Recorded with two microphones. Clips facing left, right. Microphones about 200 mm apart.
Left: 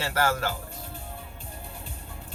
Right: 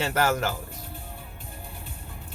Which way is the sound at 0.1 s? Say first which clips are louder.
Left 1 dB; 20° right (ahead or behind).